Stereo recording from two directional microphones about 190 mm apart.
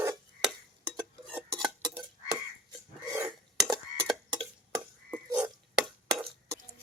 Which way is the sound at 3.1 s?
15° right (ahead or behind).